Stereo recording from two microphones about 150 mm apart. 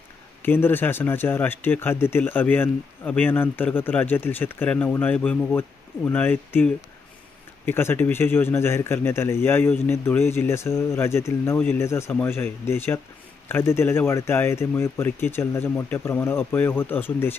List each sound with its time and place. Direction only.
0.4 s speech: 15° left (ahead or behind)